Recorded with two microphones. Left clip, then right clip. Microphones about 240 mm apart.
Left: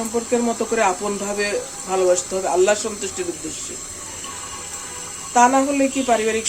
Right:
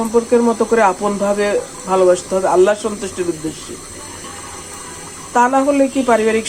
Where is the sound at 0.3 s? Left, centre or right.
Centre.